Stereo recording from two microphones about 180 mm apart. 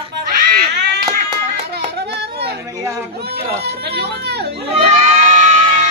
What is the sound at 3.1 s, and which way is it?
Chatter, 65° right (ahead or behind).